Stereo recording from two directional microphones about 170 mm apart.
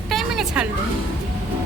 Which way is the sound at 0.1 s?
Centre (ahead or behind).